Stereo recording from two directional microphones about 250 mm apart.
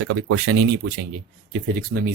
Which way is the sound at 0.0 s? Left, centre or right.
Right.